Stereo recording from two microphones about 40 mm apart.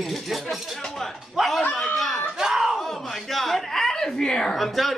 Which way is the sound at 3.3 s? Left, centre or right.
Centre.